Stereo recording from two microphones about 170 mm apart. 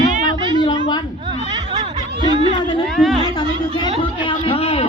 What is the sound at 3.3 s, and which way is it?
A man's voice, 25° left (ahead or behind).